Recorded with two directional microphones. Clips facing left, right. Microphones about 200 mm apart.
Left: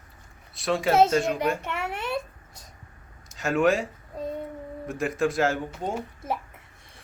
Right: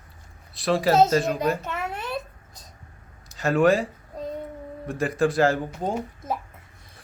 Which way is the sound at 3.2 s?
Centre (ahead or behind).